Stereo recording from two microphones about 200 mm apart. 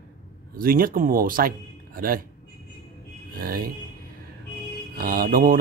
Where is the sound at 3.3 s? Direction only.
45° right (ahead or behind).